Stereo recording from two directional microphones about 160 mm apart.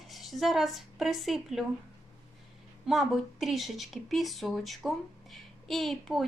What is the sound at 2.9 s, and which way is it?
Speech, centre (ahead or behind).